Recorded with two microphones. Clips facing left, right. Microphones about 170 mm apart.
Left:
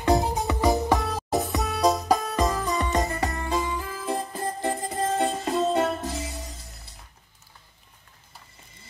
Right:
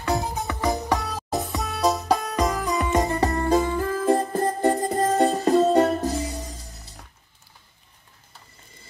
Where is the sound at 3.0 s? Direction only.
35° right (ahead or behind).